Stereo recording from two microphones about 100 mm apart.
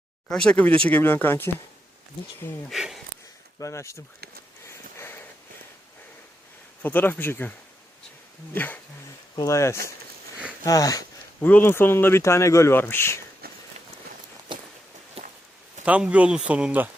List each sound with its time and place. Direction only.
0.3 s speech: 5° left (ahead or behind)
2.6 s speech: centre (ahead or behind)
3.6 s speech: 30° left (ahead or behind)
4.6 s sniff: 25° left (ahead or behind)
6.8 s speech: 20° left (ahead or behind)
8.5 s speech: 15° left (ahead or behind)
9.5 s speech: 30° left (ahead or behind)
11.4 s speech: 20° left (ahead or behind)
14.5 s a sound: 50° right (ahead or behind)
15.2 s walk: 80° right
15.8 s speech: 10° right (ahead or behind)